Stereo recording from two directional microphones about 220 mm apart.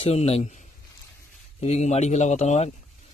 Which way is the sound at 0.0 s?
30° left (ahead or behind).